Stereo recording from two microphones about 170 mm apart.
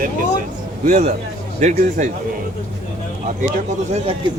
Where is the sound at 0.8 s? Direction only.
45° right (ahead or behind).